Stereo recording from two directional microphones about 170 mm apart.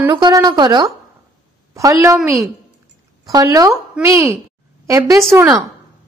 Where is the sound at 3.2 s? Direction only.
20° right (ahead or behind).